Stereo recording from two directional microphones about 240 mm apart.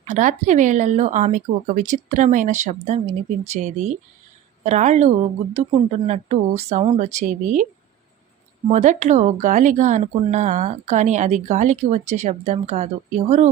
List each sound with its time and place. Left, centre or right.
0.0 s speech: right